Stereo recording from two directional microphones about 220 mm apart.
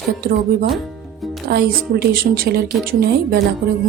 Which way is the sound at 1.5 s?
45° right (ahead or behind).